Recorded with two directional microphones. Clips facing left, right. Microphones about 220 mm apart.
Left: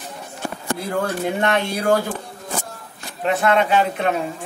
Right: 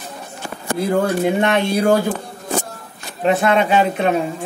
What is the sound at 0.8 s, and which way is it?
Speech, 20° right (ahead or behind).